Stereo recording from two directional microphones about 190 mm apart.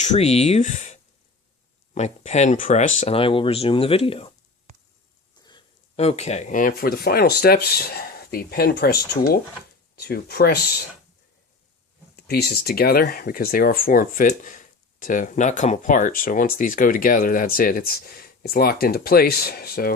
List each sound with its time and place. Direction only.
0.0 s speech: 35° left (ahead or behind)
2.0 s speech: 35° left (ahead or behind)
5.4 s a sound: 20° left (ahead or behind)
6.0 s speech: 35° left (ahead or behind); by 10.6 s 55° left (ahead or behind)
12.1 s speech: 55° left (ahead or behind)